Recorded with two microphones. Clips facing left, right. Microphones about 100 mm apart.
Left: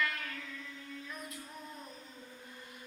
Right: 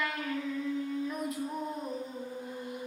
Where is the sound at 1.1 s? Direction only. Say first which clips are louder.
Right 12 dB; 50° right (ahead or behind).